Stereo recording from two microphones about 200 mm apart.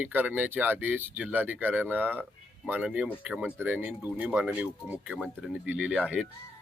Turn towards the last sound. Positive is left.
turn(degrees=-5)  # may be behind; listen again after turning